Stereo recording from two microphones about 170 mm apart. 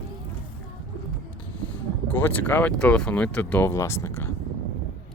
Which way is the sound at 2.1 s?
10° left (ahead or behind).